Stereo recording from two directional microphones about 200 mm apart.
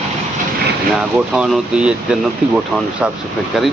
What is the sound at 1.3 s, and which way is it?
Speech, centre (ahead or behind).